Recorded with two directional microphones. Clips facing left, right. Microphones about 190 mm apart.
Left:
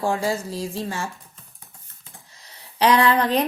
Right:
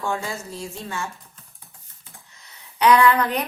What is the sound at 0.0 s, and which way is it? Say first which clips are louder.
A woman's voice: left 5 dB; 35° left (ahead or behind).